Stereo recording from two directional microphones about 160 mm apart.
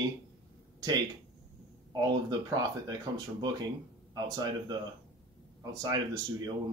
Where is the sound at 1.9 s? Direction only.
25° right (ahead or behind).